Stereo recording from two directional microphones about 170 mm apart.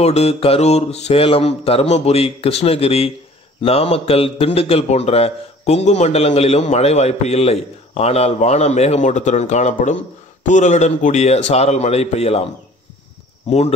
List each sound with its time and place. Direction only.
0.0 s a man's voice: 40° left (ahead or behind)
13.5 s a man's voice: 40° left (ahead or behind)